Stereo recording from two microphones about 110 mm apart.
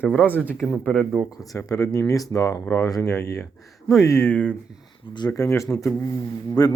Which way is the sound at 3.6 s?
Centre (ahead or behind).